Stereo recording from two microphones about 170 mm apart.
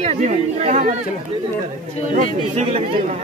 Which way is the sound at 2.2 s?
40° right (ahead or behind).